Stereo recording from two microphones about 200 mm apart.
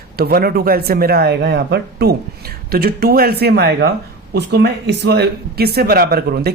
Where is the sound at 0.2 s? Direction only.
50° right (ahead or behind).